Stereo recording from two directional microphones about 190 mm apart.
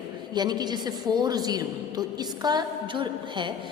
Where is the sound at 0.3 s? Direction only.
20° right (ahead or behind).